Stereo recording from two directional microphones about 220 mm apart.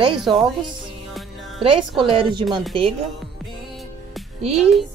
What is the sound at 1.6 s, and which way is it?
Speech, 25° right (ahead or behind).